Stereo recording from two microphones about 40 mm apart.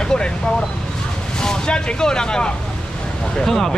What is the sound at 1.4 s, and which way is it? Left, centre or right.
Speech, left.